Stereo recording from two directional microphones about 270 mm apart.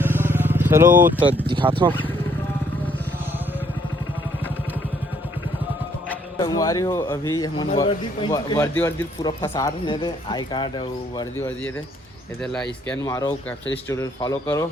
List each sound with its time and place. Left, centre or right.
0.0 s vehicle: centre
1.8 s speech: centre
6.1 s a man's voice: centre
12.9 s a man's voice: centre